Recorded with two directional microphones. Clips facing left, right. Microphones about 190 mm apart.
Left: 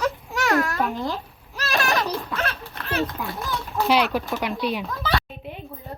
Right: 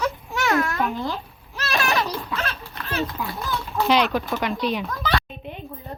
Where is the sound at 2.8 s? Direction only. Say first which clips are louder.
Left 1 dB; 60° left (ahead or behind).